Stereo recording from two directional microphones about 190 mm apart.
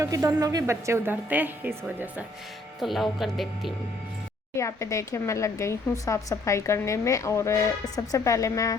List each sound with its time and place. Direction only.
0.0 s a woman's voice: 15° right (ahead or behind); by 3.7 s centre (ahead or behind)
4.5 s speech: 15° left (ahead or behind)